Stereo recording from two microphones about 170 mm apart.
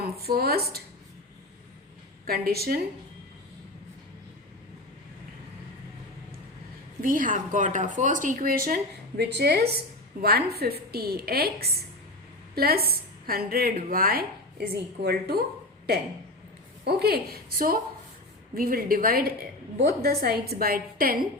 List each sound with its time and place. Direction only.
0.0 s speech: 65° right (ahead or behind)
2.2 s speech: 65° right (ahead or behind)
7.0 s speech: 55° right (ahead or behind)
16.8 s speech: 65° right (ahead or behind)